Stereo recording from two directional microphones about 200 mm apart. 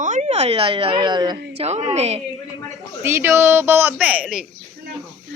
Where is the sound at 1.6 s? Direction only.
35° right (ahead or behind).